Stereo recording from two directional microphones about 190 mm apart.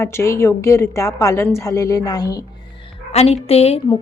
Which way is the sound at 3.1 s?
35° left (ahead or behind).